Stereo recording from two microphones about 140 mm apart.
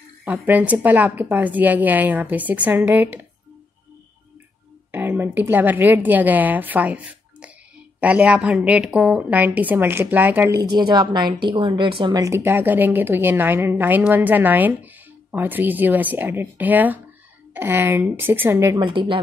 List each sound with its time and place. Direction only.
0.2 s a woman's voice: 10° right (ahead or behind)
4.9 s a woman's voice: 15° right (ahead or behind)
10.6 s a woman's voice: 30° right (ahead or behind)
12.2 s a woman's voice: 20° right (ahead or behind)
18.8 s a woman's voice: 35° right (ahead or behind)